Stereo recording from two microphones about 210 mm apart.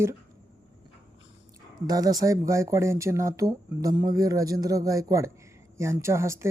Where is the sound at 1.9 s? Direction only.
20° right (ahead or behind).